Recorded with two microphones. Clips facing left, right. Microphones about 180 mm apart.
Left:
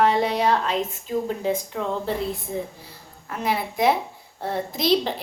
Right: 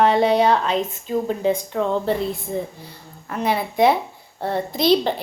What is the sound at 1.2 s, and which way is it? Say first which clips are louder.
Speech: right 5 dB; centre (ahead or behind).